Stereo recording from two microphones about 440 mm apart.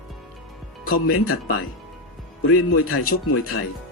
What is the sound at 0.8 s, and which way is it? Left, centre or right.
Speech, centre.